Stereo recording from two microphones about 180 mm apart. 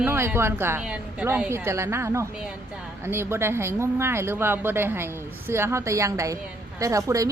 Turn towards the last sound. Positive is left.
turn(degrees=-20)  # may be behind; listen again after turning